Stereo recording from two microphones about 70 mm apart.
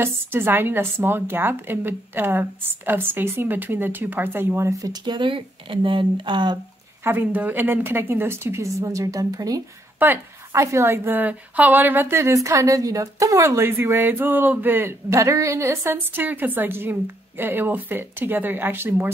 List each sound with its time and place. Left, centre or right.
0.0 s a woman's voice: right
4.7 s speech: right
6.3 s speech: right
7.1 s a woman's voice: right
8.6 s a woman's voice: right
9.9 s a woman's voice: right
10.5 s a woman's voice: right
11.1 s a woman's voice: right
13.6 s speech: right